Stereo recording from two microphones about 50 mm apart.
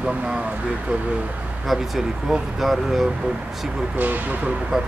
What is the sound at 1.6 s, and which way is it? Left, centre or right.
Speech, centre.